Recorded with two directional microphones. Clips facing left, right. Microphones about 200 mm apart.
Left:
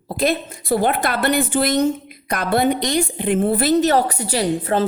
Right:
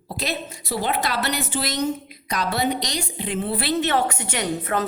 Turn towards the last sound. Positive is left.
turn(degrees=30)  # may be behind; listen again after turning